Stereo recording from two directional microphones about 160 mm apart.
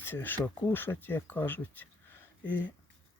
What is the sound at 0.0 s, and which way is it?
Speech, 15° left (ahead or behind).